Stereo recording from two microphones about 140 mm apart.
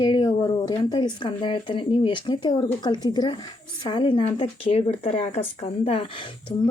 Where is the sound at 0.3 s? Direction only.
30° left (ahead or behind).